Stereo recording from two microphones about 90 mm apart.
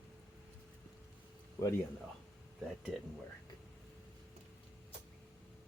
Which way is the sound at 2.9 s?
Centre (ahead or behind).